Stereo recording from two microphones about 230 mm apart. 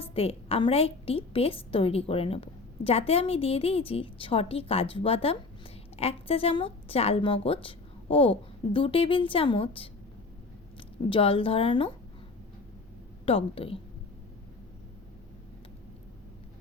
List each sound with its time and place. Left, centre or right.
0.0 s a woman's voice: left
11.1 s a woman's voice: left
13.2 s a woman's voice: left